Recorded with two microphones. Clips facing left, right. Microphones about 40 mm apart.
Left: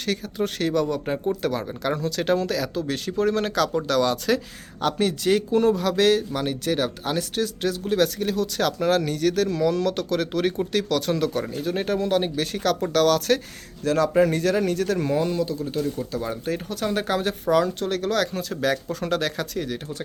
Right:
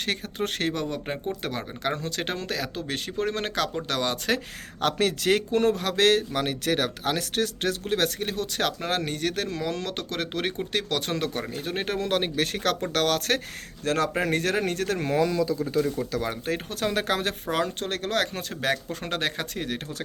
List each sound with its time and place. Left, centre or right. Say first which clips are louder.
0.0 s speech: left 3 dB; right
0.7 s speech: left 6 dB; right
4.8 s speech: left 1 dB; right
11.9 s speech: even; right
12.9 s speech: left 7 dB; right
16.1 s speech: left 1 dB; right
17.4 s speech: left 6 dB; right